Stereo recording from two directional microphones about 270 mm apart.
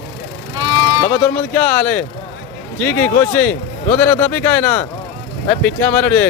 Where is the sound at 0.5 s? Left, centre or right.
Centre.